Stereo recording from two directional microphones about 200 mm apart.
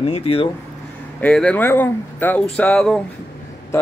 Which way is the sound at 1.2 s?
5° left (ahead or behind).